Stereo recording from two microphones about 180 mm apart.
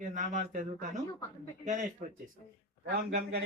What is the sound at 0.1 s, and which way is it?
Speech, 45° right (ahead or behind).